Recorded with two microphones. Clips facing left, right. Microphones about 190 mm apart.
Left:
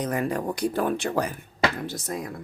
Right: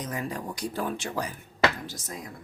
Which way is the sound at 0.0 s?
60° left (ahead or behind).